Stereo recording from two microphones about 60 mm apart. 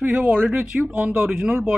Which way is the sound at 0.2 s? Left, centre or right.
Right.